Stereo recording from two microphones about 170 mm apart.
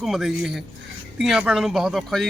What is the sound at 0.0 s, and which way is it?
A man's voice, centre (ahead or behind).